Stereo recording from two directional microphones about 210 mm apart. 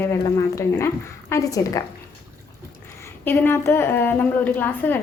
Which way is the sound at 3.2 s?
10° left (ahead or behind).